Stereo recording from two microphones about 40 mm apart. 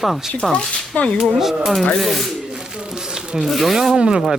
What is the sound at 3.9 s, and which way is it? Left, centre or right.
Speech, centre.